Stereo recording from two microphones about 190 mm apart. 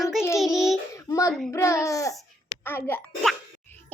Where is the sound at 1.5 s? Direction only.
15° left (ahead or behind).